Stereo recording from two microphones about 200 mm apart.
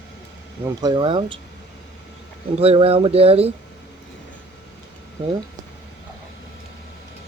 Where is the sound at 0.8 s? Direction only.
20° right (ahead or behind).